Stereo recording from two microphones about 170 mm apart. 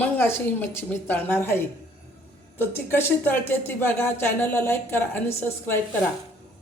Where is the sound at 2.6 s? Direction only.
15° left (ahead or behind).